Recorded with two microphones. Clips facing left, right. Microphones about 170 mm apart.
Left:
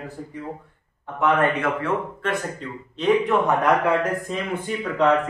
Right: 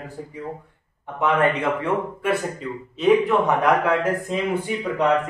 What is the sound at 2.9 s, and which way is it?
Speech, centre (ahead or behind).